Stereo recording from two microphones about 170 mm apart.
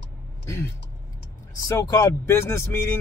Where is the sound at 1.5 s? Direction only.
20° left (ahead or behind).